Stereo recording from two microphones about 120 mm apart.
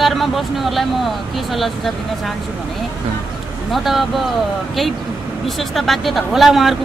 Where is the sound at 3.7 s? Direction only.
Centre (ahead or behind).